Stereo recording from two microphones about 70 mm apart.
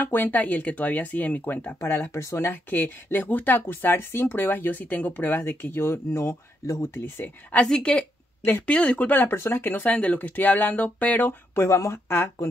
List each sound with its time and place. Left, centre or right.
0.0 s speech: left
1.9 s speech: left
2.7 s speech: left
7.6 s speech: centre; by 12.4 s left